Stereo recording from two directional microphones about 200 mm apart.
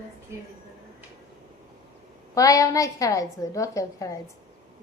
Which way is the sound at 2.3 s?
15° left (ahead or behind).